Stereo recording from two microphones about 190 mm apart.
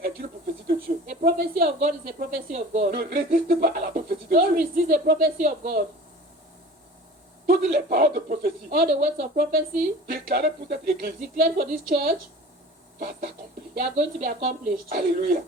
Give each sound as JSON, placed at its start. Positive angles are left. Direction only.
{"t": 0.9, "sound": "speech", "side_deg": -45}
{"t": 7.4, "sound": "speech", "side_deg": -45}
{"t": 13.7, "sound": "speech", "side_deg": -40}